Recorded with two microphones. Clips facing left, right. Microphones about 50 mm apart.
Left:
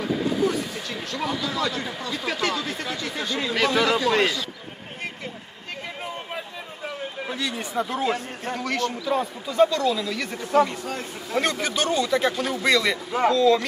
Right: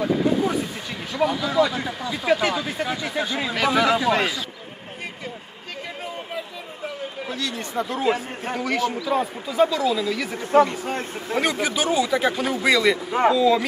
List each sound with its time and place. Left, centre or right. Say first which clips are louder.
0.4 s vehicle: left 1 dB; centre
1.1 s speech: right 7 dB; centre
7.2 s speech: even; centre
7.7 s speech: right 3 dB; centre
10.4 s speech: right 3 dB; right
11.6 s speech: right 2 dB; centre